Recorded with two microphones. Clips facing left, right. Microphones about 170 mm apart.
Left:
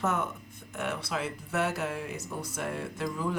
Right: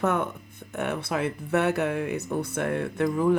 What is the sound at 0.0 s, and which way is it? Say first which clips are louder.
Speech: right 5 dB; 60° right (ahead or behind).